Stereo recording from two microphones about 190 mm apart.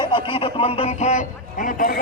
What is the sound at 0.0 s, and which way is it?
Speech, 25° left (ahead or behind).